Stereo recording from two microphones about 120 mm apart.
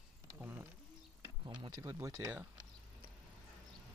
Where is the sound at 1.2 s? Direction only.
35° right (ahead or behind).